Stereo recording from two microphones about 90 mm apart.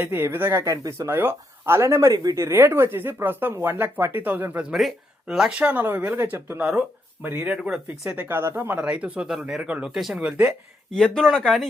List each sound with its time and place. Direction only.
0.0 s speech: 25° right (ahead or behind)
0.6 s speech: 35° right (ahead or behind)
1.1 s speech: 25° right (ahead or behind)
4.7 s speech: 5° right (ahead or behind)
5.5 s speech: 15° right (ahead or behind)
8.9 s speech: 15° right (ahead or behind)
10.9 s speech: 10° left (ahead or behind)